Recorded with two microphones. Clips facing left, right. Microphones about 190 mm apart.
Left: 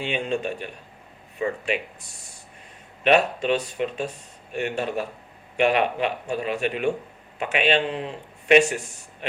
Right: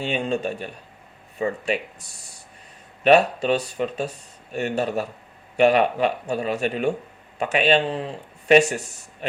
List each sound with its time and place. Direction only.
0.0 s speech: 40° right (ahead or behind)
3.0 s speech: 40° right (ahead or behind)